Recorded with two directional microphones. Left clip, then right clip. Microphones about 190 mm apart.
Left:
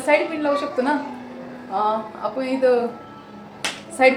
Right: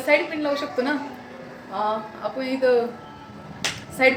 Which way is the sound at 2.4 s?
Centre (ahead or behind).